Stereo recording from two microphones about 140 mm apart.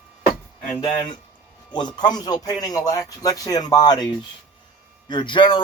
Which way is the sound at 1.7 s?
30° left (ahead or behind).